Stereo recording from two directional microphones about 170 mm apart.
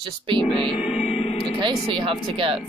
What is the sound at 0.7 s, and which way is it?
Music, 35° left (ahead or behind).